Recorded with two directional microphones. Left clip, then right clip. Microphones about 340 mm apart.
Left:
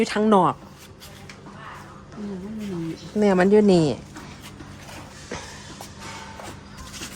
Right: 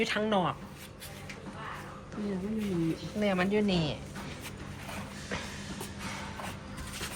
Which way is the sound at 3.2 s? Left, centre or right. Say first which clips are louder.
Left 11 dB; centre.